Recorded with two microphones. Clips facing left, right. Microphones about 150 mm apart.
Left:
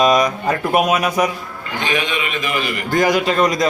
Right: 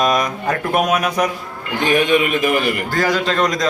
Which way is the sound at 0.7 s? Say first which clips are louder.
Left 1 dB; 5° left (ahead or behind).